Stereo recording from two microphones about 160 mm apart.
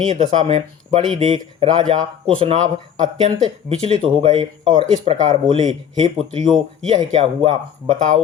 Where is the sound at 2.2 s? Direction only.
35° right (ahead or behind).